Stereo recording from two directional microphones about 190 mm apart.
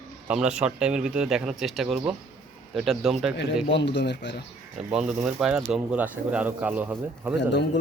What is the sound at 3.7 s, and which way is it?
Speech, 65° left (ahead or behind).